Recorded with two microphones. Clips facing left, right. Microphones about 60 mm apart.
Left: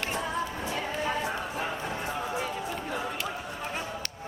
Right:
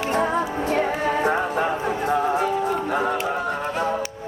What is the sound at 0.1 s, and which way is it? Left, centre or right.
Music, right.